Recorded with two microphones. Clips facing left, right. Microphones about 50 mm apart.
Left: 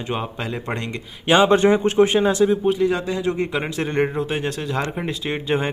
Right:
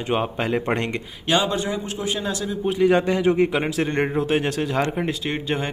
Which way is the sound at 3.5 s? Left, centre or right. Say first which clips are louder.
Right 1 dB; centre.